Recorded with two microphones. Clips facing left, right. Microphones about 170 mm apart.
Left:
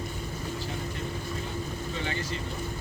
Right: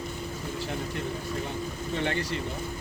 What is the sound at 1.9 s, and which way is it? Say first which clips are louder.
Vehicle: right 6 dB; 65° right (ahead or behind).